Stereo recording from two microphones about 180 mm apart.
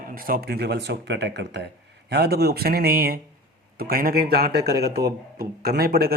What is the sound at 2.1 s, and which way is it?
A man's voice, 60° right (ahead or behind).